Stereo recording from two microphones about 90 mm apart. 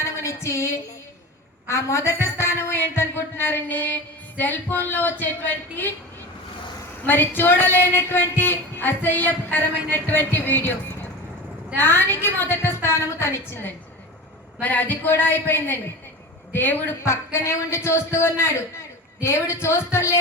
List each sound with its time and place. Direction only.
0.0 s music: 30° left (ahead or behind)
1.6 s speech: 30° left (ahead or behind)
7.0 s speech: 25° left (ahead or behind)
11.8 s a woman's voice: 25° left (ahead or behind)